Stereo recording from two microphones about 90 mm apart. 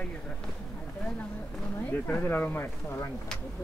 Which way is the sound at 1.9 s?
20° left (ahead or behind).